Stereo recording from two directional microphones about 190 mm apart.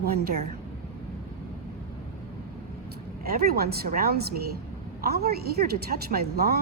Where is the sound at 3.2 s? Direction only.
50° right (ahead or behind).